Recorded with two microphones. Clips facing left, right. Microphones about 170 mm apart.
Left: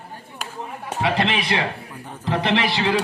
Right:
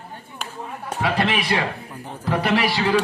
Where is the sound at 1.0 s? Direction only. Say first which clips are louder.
Even; 25° left (ahead or behind).